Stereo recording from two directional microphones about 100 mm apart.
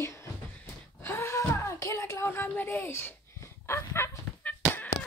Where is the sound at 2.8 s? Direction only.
25° left (ahead or behind).